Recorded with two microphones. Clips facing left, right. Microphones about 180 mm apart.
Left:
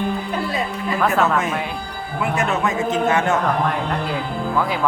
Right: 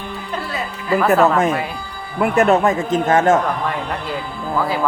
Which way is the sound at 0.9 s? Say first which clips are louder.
Right 5 dB; 5° right (ahead or behind).